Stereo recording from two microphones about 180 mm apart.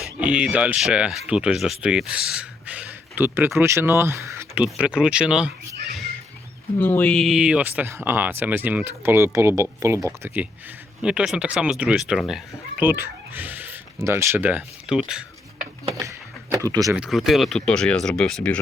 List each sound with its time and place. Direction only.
0.2 s speech: 5° right (ahead or behind)
6.7 s speech: 10° left (ahead or behind)
16.0 s a sound: 15° right (ahead or behind)
16.9 s speech: 5° right (ahead or behind)